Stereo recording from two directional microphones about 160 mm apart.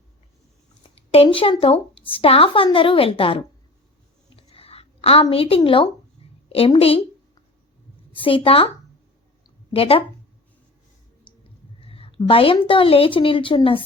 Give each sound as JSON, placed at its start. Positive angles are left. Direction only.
{"t": 0.9, "sound": "a woman's voice", "side_deg": 40}
{"t": 4.5, "sound": "a sound", "side_deg": 40}
{"t": 5.3, "sound": "a woman's voice", "side_deg": 35}
{"t": 8.1, "sound": "a woman's voice", "side_deg": 35}
{"t": 9.7, "sound": "a woman's voice", "side_deg": 35}
{"t": 11.8, "sound": "a woman's voice", "side_deg": 35}